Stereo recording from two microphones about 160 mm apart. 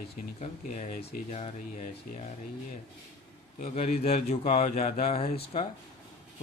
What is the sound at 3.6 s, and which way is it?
Speech, 40° left (ahead or behind).